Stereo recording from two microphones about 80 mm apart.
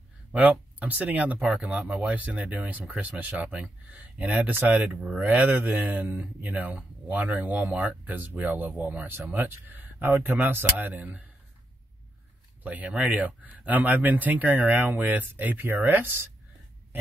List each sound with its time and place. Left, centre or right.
0.3 s speech: centre
12.6 s speech: centre